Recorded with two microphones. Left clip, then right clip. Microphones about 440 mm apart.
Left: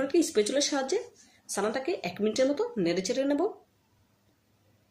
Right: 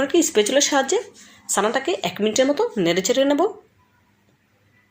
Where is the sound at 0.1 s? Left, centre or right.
Right.